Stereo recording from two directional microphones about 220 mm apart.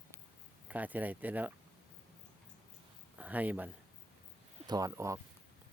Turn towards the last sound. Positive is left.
turn(degrees=-15)  # may be behind; listen again after turning